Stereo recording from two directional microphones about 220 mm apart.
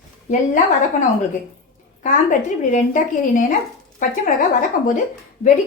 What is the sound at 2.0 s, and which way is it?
A woman's voice, 35° left (ahead or behind).